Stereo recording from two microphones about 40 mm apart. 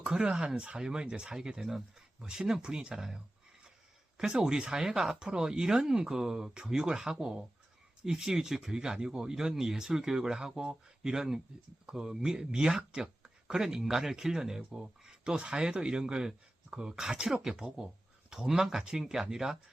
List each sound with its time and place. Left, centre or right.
0.0 s speech: right
0.8 s speech: centre
2.2 s speech: centre
4.2 s speech: centre